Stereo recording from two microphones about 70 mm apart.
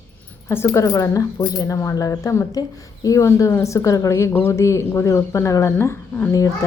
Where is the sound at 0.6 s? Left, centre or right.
Left.